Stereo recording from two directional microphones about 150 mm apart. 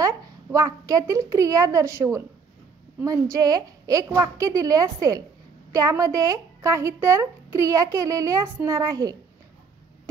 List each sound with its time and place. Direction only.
0.0 s speech: 20° right (ahead or behind)